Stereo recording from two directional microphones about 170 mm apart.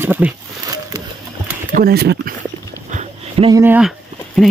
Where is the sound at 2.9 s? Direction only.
40° right (ahead or behind).